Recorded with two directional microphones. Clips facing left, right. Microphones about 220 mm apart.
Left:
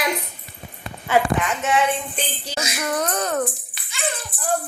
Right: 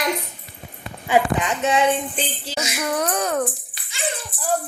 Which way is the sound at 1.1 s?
15° right (ahead or behind).